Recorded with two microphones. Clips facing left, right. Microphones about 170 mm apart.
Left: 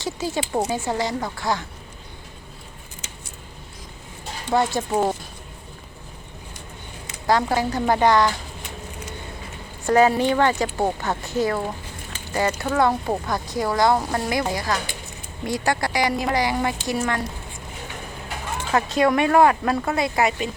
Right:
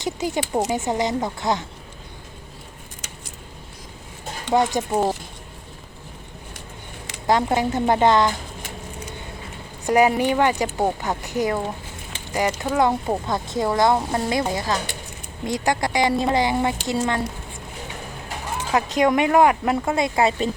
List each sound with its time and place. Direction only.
0.0 s speech: 20° right (ahead or behind)
4.4 s speech: 15° right (ahead or behind)
7.3 s speech: 20° right (ahead or behind)
9.8 s speech: 15° right (ahead or behind)
18.7 s speech: 15° right (ahead or behind)